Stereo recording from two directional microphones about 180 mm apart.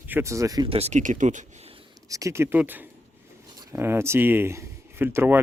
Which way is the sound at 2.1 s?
15° right (ahead or behind).